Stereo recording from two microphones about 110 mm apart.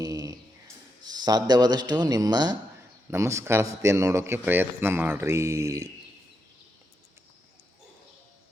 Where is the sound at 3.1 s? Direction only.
25° right (ahead or behind).